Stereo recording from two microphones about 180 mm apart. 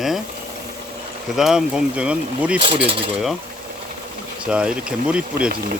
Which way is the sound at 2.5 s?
30° right (ahead or behind).